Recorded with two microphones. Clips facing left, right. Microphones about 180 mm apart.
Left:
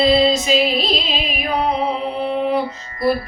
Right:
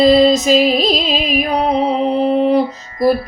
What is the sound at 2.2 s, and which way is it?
Mantra, 40° right (ahead or behind).